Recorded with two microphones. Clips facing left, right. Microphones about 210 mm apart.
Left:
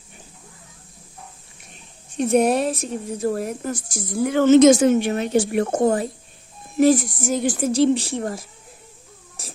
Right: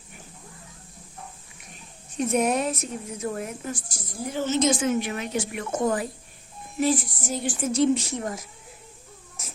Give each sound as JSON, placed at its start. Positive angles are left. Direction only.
{"t": 2.1, "sound": "a woman's voice", "side_deg": 35}
{"t": 3.9, "sound": "a woman's voice", "side_deg": 75}
{"t": 4.8, "sound": "a woman's voice", "side_deg": 30}
{"t": 9.4, "sound": "a sound", "side_deg": 35}